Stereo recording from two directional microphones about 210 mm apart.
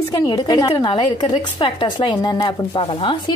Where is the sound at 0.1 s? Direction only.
20° left (ahead or behind).